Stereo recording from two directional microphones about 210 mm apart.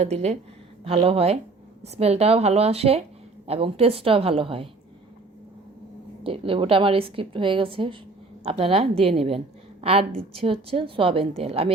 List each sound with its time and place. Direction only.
0.0 s a woman's voice: 30° right (ahead or behind)
6.2 s a woman's voice: 25° right (ahead or behind)